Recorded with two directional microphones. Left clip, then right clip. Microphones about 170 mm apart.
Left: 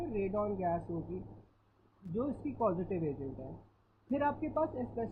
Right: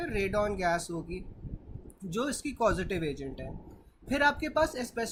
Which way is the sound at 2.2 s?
30° right (ahead or behind).